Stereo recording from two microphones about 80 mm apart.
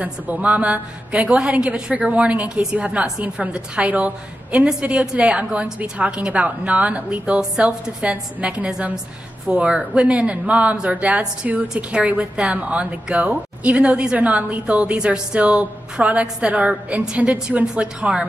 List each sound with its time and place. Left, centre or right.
0.0 s a woman's voice: centre